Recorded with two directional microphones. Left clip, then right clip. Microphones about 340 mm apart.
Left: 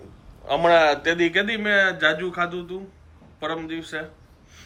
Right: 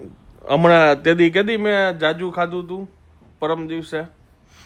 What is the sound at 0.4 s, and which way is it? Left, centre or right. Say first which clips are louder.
A man's voice: right 4 dB; right.